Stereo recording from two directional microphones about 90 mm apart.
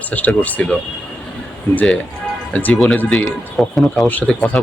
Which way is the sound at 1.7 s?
15° left (ahead or behind).